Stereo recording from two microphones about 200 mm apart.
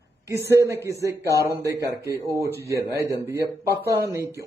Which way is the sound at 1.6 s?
55° right (ahead or behind).